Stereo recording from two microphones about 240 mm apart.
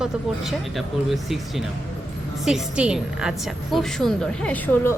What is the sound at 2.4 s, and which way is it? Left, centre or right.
A woman's voice, centre.